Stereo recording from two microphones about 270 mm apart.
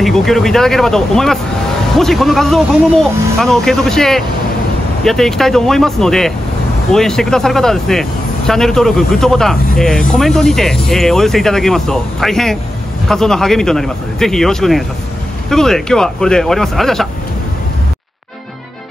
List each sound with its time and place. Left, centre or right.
0.0 s speech: centre